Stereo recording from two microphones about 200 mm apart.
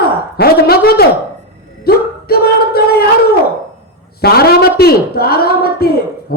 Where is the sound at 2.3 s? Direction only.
50° left (ahead or behind).